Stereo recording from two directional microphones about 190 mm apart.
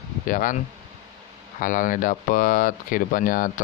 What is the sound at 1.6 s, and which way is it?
Speech, 45° left (ahead or behind).